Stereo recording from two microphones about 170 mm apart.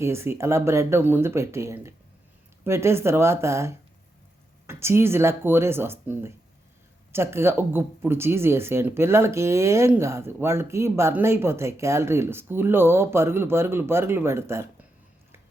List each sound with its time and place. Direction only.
0.0 s speech: 15° right (ahead or behind)